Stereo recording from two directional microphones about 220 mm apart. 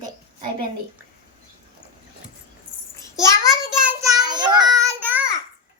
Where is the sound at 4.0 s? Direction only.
15° right (ahead or behind).